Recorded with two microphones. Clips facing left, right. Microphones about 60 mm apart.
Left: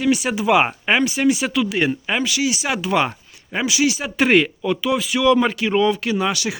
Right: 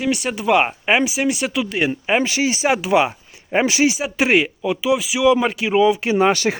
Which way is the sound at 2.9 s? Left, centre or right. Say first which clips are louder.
Right 2 dB; centre.